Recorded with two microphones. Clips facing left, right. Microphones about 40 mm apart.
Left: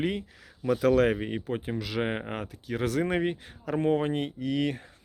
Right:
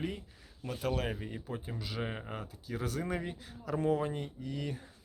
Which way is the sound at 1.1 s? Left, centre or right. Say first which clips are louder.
Left 10 dB; left.